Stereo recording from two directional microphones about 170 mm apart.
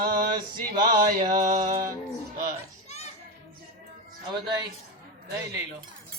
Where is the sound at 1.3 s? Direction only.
55° right (ahead or behind).